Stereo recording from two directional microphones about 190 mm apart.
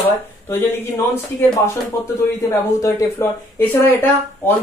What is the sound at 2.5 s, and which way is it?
Speech, 15° left (ahead or behind).